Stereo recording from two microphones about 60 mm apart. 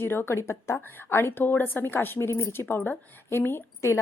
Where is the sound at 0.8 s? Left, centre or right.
Left.